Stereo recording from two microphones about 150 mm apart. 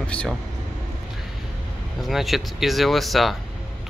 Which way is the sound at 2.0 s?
Centre (ahead or behind).